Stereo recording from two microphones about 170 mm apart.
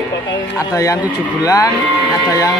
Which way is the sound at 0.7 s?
20° left (ahead or behind).